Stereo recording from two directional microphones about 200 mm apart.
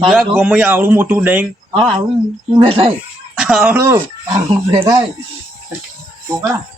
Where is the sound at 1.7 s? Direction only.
25° right (ahead or behind).